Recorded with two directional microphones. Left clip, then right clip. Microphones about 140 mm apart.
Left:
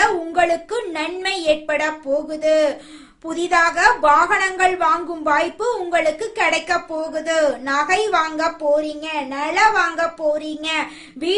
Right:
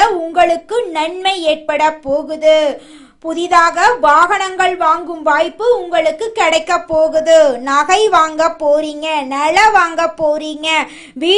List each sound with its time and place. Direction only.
0.3 s a woman's voice: 30° right (ahead or behind); by 11.3 s 50° right (ahead or behind)